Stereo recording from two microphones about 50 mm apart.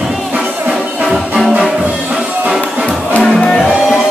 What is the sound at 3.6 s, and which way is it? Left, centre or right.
Music, centre.